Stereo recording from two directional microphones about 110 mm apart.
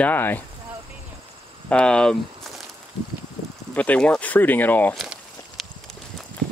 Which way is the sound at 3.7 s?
10° left (ahead or behind).